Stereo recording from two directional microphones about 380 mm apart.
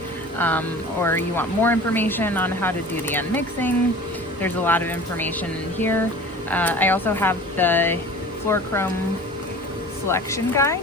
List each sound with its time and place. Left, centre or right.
0.3 s speech: centre
10.1 s speech: centre